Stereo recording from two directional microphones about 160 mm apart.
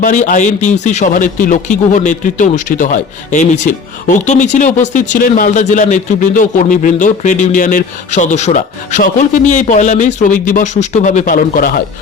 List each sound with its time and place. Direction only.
0.0 s speech: 55° left (ahead or behind)